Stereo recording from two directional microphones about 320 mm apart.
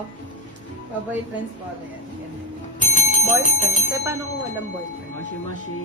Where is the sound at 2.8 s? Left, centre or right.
Left.